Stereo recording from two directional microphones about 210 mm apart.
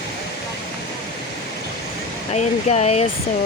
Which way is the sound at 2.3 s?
30° left (ahead or behind).